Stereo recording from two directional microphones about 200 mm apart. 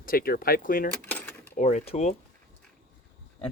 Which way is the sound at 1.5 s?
35° left (ahead or behind).